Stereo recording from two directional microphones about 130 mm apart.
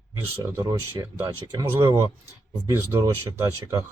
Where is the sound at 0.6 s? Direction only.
30° right (ahead or behind).